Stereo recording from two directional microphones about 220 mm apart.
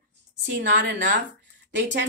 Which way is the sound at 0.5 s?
55° right (ahead or behind).